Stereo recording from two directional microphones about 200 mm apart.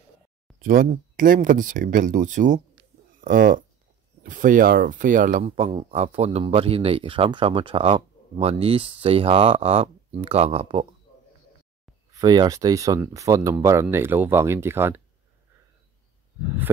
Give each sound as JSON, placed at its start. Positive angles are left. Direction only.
{"t": 0.6, "sound": "speech", "side_deg": -45}
{"t": 12.1, "sound": "speech", "side_deg": -20}